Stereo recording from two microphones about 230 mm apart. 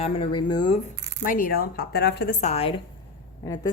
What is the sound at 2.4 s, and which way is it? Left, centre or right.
Speech, left.